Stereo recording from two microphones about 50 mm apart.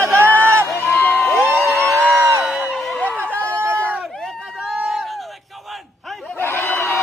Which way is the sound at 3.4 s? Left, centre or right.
Right.